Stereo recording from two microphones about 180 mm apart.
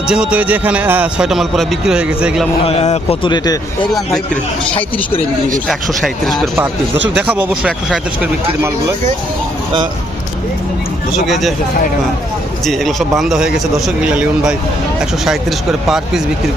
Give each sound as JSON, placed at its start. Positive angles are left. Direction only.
{"t": 0.1, "sound": "a man's voice", "side_deg": -5}
{"t": 2.6, "sound": "speech", "side_deg": 35}
{"t": 5.6, "sound": "a man's voice", "side_deg": 0}
{"t": 12.6, "sound": "a man's voice", "side_deg": 0}